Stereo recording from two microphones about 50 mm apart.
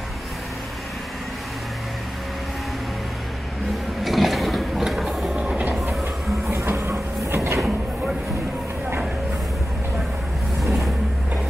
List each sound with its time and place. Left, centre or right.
4.0 s a sound: centre
5.3 s train: centre
6.7 s train: right
10.6 s vehicle: centre